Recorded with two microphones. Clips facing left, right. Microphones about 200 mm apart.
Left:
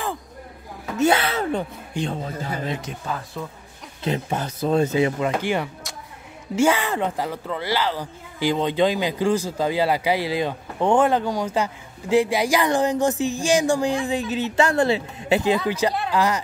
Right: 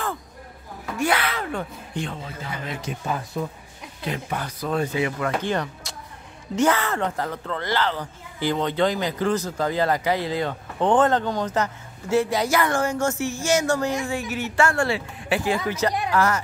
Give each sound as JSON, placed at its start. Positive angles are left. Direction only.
{"t": 0.9, "sound": "gasp", "side_deg": 25}
{"t": 2.0, "sound": "a man's voice", "side_deg": 40}
{"t": 3.4, "sound": "a woman's voice", "side_deg": -15}
{"t": 4.0, "sound": "speech", "side_deg": 25}
{"t": 5.3, "sound": "speech", "side_deg": 10}